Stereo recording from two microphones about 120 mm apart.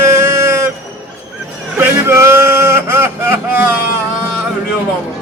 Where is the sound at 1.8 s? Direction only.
20° right (ahead or behind).